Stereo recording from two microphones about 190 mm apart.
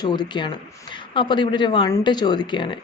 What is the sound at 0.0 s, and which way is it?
A woman's voice, 25° left (ahead or behind).